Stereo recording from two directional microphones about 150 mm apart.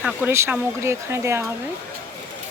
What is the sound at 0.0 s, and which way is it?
Speech, 10° right (ahead or behind).